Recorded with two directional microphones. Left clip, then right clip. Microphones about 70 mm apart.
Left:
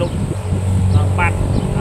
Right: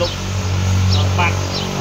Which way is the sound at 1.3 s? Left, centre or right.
Centre.